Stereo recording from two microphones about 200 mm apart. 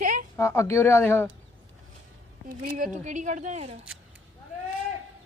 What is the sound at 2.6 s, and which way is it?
Speech, 45° right (ahead or behind).